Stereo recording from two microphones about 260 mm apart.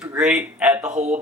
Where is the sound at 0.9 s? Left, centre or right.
Right.